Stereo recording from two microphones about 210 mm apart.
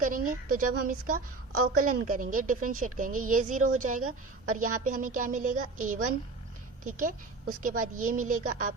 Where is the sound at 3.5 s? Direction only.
90° right.